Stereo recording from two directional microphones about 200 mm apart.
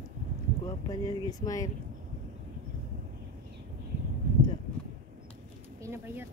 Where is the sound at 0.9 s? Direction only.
20° left (ahead or behind).